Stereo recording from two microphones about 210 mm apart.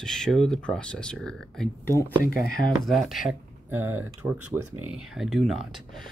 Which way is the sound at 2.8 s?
Centre (ahead or behind).